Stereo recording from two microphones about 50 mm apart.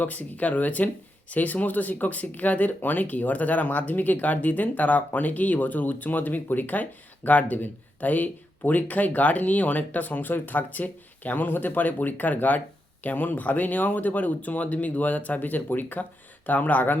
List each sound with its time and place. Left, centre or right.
0.0 s speech: left